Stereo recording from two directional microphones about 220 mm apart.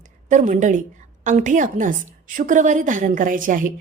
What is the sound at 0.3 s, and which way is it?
A woman's voice, 35° right (ahead or behind).